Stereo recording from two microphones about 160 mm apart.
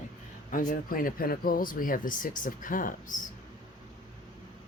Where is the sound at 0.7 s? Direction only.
65° left (ahead or behind).